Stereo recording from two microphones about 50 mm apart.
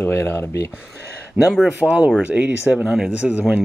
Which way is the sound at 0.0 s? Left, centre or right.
Left.